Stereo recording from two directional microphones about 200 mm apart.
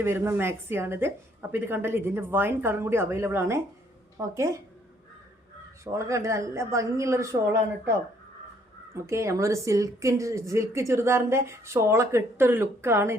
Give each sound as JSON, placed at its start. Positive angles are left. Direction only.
{"t": 0.0, "sound": "a woman's voice", "side_deg": -10}
{"t": 5.8, "sound": "a woman's voice", "side_deg": -15}
{"t": 9.0, "sound": "a woman's voice", "side_deg": -15}